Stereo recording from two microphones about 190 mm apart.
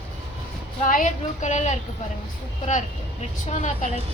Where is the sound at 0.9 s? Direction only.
45° left (ahead or behind).